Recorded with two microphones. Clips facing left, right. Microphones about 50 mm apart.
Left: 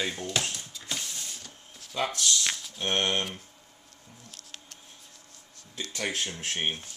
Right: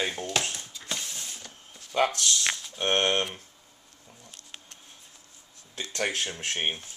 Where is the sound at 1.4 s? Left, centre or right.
Centre.